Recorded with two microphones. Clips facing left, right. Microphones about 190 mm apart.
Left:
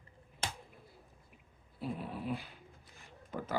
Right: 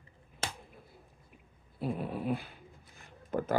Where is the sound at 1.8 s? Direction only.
55° right (ahead or behind).